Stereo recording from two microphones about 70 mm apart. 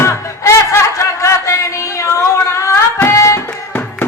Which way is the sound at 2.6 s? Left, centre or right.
Left.